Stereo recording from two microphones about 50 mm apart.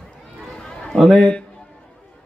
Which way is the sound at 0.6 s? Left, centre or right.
Centre.